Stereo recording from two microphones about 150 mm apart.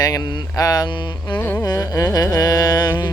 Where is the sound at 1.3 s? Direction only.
10° left (ahead or behind).